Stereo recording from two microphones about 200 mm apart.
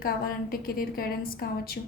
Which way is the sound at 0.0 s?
45° left (ahead or behind).